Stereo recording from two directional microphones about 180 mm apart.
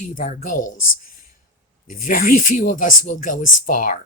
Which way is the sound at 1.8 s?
50° left (ahead or behind).